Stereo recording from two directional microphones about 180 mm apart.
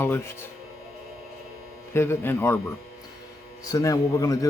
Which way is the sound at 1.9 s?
15° left (ahead or behind).